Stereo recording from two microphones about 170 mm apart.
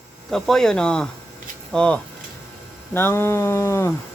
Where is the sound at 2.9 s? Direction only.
15° left (ahead or behind).